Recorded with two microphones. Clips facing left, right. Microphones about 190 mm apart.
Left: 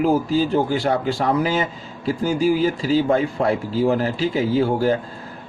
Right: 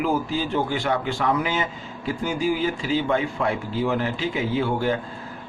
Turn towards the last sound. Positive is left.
turn(degrees=40)  # may be behind; listen again after turning